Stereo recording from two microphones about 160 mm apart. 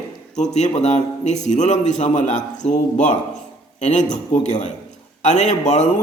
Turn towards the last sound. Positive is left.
turn(degrees=45)  # may be behind; listen again after turning